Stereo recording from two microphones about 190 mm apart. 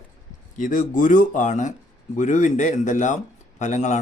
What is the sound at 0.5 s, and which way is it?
A man's voice, 45° left (ahead or behind).